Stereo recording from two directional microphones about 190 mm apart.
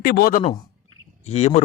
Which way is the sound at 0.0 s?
55° left (ahead or behind).